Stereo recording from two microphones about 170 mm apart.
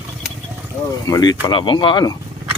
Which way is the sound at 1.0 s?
25° left (ahead or behind).